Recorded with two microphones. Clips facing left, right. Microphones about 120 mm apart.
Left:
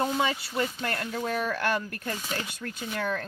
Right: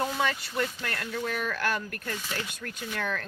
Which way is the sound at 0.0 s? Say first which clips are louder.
Left 2 dB; 20° left (ahead or behind).